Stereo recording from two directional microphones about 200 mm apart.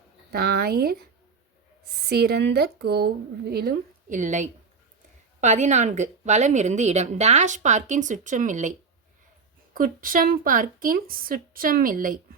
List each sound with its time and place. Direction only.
0.3 s a woman's voice: 50° right (ahead or behind)
2.0 s a woman's voice: 55° right (ahead or behind)
9.7 s a woman's voice: 45° right (ahead or behind)